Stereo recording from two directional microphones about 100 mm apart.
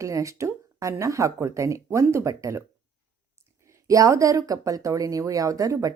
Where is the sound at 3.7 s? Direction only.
35° right (ahead or behind).